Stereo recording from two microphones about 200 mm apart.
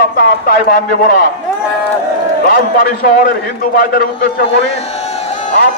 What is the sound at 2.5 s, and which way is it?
A man's voice, 45° left (ahead or behind).